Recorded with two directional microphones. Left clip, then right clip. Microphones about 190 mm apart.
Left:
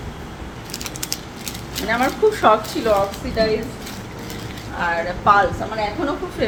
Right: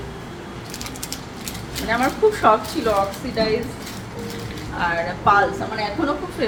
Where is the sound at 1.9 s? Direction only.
25° left (ahead or behind).